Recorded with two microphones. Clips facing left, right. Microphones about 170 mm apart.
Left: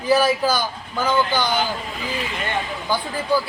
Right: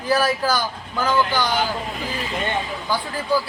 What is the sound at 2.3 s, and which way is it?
Speech, 20° right (ahead or behind).